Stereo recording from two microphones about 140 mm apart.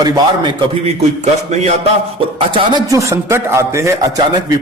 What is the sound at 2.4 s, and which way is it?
Speech, 40° right (ahead or behind).